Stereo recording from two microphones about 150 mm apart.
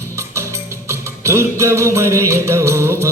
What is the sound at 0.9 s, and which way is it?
Music, 20° right (ahead or behind).